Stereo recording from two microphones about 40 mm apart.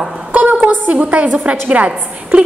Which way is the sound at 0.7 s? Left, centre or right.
Right.